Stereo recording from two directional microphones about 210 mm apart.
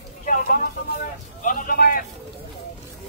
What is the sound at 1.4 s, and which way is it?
Speech, 40° left (ahead or behind).